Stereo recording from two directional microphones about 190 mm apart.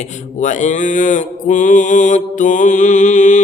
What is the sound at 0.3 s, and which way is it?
Mantra, 40° left (ahead or behind).